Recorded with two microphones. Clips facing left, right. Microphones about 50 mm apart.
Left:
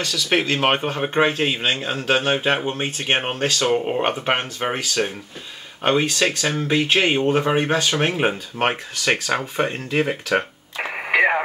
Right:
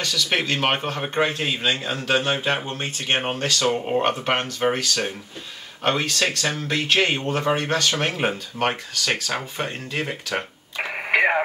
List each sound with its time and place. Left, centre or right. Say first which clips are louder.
0.0 s speech: left 2 dB; centre
10.9 s radio: left 2 dB; centre